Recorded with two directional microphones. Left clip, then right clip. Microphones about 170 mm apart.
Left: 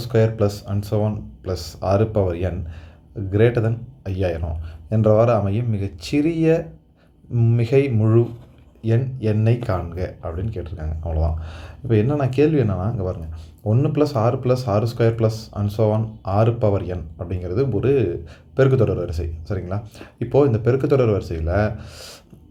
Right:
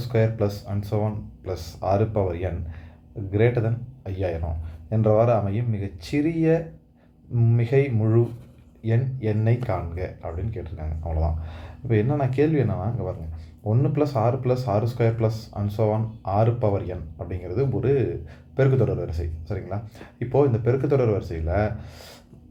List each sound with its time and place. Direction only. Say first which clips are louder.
0.0 s speech: left 4 dB; 35° left (ahead or behind)